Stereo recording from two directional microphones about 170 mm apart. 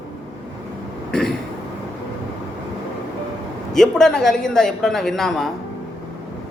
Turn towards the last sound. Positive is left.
turn(degrees=0)  # may be behind; listen again after turning